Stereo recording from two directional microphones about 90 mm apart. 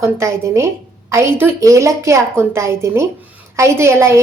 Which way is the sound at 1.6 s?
35° right (ahead or behind).